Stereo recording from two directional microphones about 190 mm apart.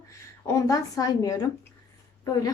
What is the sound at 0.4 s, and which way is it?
A woman's voice, 15° left (ahead or behind).